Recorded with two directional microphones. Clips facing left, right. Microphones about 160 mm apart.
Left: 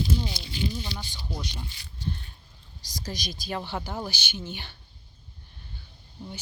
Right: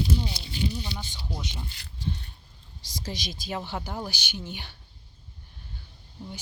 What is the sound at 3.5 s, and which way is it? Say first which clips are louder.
Speech: left 1 dB; 15° right (ahead or behind).